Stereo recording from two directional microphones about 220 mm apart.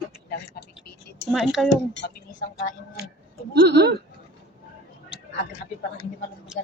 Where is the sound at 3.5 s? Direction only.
50° right (ahead or behind).